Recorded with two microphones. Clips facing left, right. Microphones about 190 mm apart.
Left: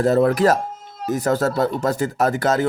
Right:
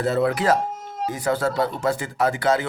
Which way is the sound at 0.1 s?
45° left (ahead or behind).